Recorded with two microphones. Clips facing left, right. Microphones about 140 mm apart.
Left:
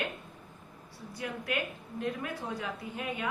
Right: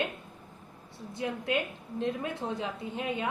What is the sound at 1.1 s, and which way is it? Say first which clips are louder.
A woman's voice: right 4 dB; 25° right (ahead or behind).